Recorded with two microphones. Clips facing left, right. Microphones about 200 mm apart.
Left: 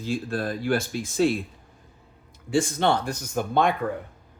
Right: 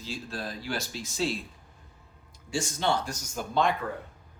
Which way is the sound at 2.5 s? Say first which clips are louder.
Left 6 dB; 55° left (ahead or behind).